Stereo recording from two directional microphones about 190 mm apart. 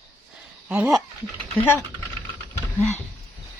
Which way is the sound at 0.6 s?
10° right (ahead or behind).